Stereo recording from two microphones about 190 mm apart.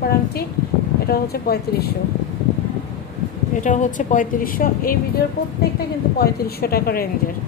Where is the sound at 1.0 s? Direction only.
55° left (ahead or behind).